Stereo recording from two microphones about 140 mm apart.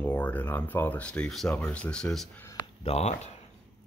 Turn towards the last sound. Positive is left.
turn(degrees=50)  # may be behind; listen again after turning